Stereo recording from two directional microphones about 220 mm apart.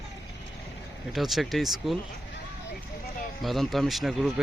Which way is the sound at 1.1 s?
Centre (ahead or behind).